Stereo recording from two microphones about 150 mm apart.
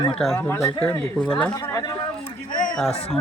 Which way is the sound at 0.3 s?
15° left (ahead or behind).